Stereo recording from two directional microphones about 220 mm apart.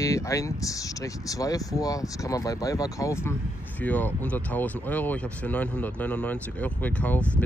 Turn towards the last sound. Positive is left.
turn(degrees=5)  # may be behind; listen again after turning